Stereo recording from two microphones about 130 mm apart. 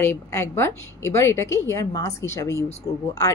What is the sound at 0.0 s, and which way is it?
Speech, 20° left (ahead or behind).